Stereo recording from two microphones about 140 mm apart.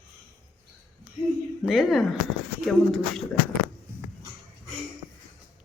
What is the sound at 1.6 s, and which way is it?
Speech, centre (ahead or behind).